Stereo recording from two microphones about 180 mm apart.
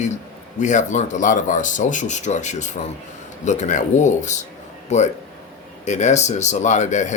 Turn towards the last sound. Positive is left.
turn(degrees=40)  # may be behind; listen again after turning